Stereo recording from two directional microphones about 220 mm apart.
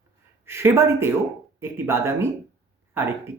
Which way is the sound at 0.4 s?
10° right (ahead or behind).